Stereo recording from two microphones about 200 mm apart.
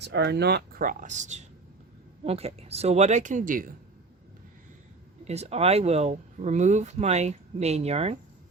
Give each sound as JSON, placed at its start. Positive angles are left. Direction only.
{"t": 0.0, "sound": "speech", "side_deg": -55}
{"t": 5.2, "sound": "speech", "side_deg": -35}